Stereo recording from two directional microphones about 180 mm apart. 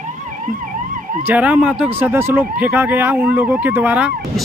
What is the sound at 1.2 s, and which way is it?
Speech, 10° right (ahead or behind).